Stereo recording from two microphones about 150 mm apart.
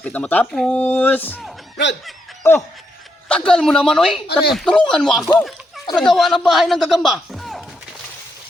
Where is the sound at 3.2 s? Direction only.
5° left (ahead or behind).